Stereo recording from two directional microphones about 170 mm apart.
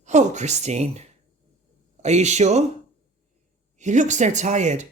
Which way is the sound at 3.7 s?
45° right (ahead or behind).